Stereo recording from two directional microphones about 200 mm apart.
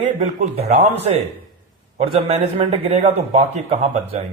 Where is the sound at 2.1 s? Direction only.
30° right (ahead or behind).